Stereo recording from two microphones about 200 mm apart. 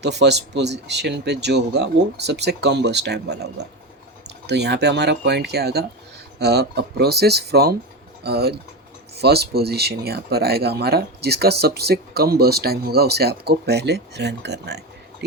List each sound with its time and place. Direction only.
0.0 s speech: 60° right (ahead or behind)